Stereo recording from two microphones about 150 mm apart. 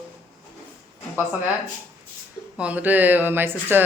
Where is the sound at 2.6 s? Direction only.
10° right (ahead or behind).